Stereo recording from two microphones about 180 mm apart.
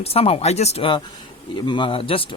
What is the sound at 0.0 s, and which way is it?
Speech, 35° left (ahead or behind).